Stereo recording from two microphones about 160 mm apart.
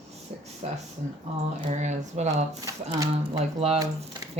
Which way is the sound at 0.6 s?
40° right (ahead or behind).